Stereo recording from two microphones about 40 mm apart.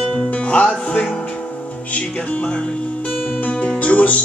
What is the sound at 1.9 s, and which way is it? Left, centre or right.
Speech, left.